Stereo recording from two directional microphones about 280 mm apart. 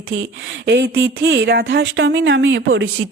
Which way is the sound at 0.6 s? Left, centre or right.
Right.